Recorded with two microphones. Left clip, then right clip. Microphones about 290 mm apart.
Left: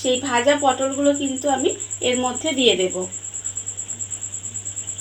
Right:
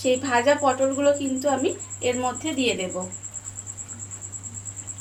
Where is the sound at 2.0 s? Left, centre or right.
Centre.